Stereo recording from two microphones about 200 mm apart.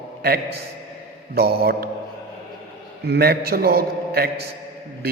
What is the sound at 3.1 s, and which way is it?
A man's voice, 50° right (ahead or behind).